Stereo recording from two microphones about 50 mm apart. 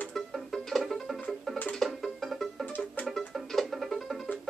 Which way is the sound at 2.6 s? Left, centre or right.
Left.